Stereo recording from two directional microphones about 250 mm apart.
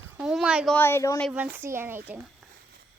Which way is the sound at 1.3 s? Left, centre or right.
Centre.